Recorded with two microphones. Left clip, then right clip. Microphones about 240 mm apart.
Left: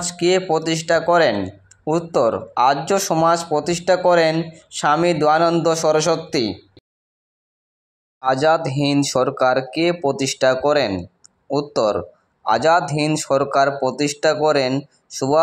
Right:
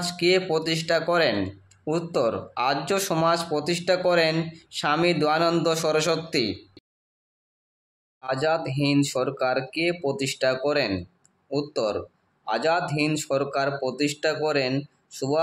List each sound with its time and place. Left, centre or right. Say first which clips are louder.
0.0 s music: left 4 dB; centre
0.5 s speech: left 6 dB; centre
8.2 s speech: left 8 dB; centre